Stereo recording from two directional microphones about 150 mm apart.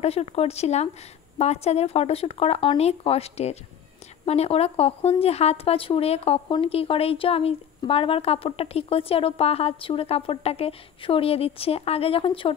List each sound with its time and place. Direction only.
0.0 s a woman's voice: 40° left (ahead or behind)